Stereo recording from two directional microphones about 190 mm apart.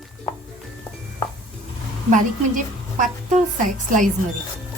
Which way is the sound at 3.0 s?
45° right (ahead or behind).